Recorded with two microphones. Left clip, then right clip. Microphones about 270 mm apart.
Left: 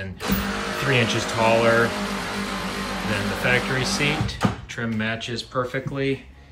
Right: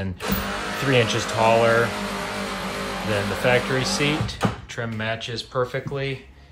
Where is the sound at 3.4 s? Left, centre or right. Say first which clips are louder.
Right 1 dB; centre.